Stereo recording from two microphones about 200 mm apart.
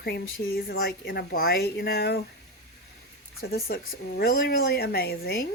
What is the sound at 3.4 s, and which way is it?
A woman's voice, 50° left (ahead or behind).